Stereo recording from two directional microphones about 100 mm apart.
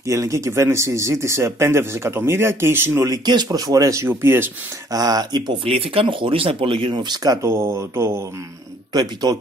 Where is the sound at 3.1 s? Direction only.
45° right (ahead or behind).